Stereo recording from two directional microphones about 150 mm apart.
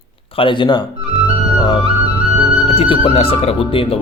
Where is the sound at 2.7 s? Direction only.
35° left (ahead or behind).